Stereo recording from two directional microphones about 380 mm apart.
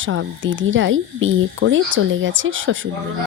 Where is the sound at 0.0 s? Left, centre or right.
Right.